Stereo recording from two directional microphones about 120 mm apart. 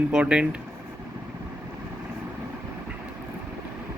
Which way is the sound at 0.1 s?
10° right (ahead or behind).